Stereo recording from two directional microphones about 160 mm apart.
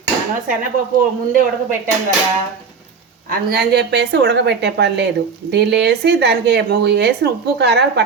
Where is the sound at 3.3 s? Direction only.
75° right (ahead or behind).